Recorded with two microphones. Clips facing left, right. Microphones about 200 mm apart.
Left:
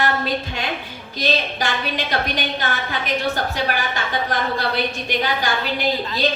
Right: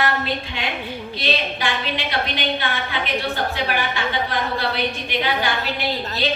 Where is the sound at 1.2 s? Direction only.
40° left (ahead or behind).